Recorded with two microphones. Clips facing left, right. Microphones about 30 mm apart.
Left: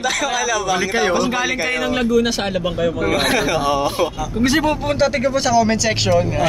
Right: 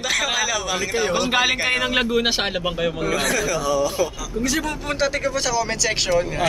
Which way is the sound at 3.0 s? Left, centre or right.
Left.